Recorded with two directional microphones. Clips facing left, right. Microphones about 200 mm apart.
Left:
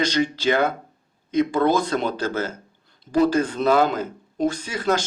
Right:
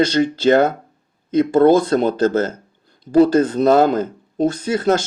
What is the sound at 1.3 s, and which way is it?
Speech, 40° right (ahead or behind).